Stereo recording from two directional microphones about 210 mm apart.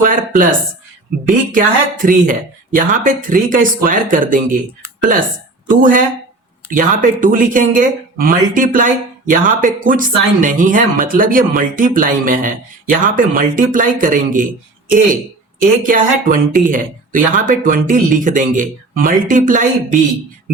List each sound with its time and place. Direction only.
0.0 s speech: 40° right (ahead or behind)
5.6 s speech: 40° right (ahead or behind)